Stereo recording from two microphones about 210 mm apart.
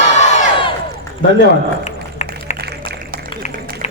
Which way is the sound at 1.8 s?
35° left (ahead or behind).